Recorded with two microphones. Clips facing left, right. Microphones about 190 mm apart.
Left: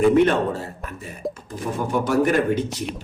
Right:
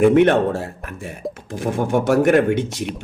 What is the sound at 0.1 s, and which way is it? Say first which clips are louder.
Speech: right 3 dB; 65° right (ahead or behind).